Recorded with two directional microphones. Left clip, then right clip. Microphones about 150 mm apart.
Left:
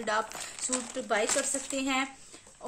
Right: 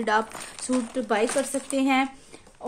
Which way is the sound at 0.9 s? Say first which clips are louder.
Right 4 dB; 45° right (ahead or behind).